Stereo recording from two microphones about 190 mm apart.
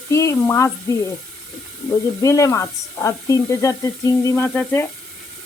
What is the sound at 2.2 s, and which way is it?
Speech, 15° left (ahead or behind).